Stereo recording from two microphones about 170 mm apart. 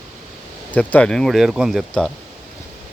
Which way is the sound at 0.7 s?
10° left (ahead or behind).